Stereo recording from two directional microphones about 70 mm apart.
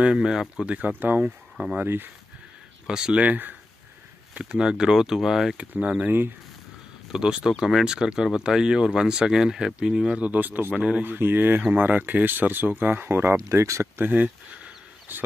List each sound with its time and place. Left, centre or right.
0.0 s speech: centre
0.7 s speech: right
2.9 s speech: centre
5.6 s speech: centre
7.1 s speech: centre
10.2 s speech: right
11.1 s speech: right
13.4 s speech: right
13.9 s a sound: right